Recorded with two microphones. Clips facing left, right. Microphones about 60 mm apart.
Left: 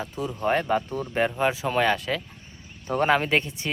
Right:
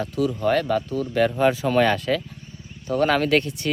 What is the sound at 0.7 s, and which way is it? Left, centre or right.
Speech, left.